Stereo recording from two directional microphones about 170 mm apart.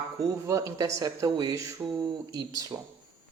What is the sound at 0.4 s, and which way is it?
Speech, 20° right (ahead or behind).